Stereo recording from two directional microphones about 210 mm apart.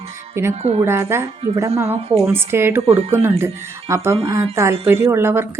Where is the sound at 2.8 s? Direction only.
30° right (ahead or behind).